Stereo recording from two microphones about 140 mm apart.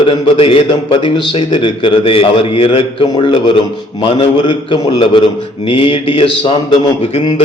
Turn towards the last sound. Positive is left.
turn(degrees=35)  # may be behind; listen again after turning